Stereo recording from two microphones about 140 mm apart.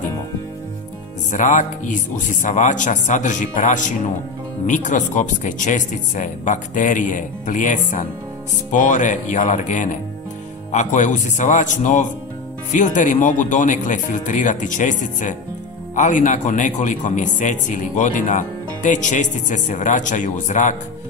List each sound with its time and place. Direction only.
1.3 s a man's voice: 65° left (ahead or behind)